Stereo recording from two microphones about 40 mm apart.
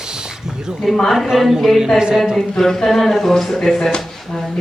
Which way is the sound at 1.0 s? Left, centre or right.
Centre.